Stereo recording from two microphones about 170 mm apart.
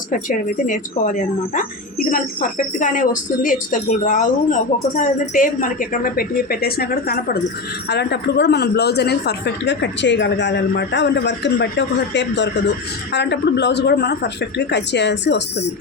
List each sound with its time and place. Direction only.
0.1 s a woman's voice: 50° left (ahead or behind)
7.9 s a woman's voice: 80° left